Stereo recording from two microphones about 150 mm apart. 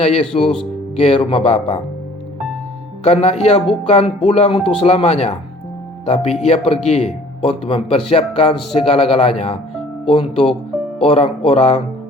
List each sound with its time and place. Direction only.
0.0 s speech: 45° left (ahead or behind)
3.0 s a man's voice: 45° left (ahead or behind)